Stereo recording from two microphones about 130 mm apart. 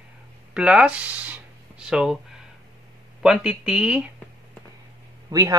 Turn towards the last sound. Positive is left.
turn(degrees=-30)  # may be behind; listen again after turning